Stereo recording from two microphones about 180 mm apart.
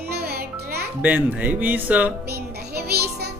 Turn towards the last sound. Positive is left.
turn(degrees=-60)  # may be behind; listen again after turning